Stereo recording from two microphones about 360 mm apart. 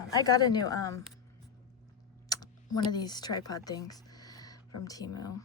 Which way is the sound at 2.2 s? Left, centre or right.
Centre.